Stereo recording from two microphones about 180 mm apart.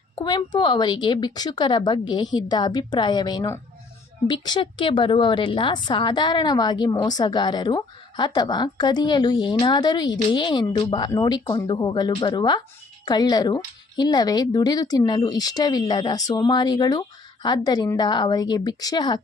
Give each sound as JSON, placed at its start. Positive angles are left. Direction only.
{"t": 0.2, "sound": "a woman's voice", "side_deg": 25}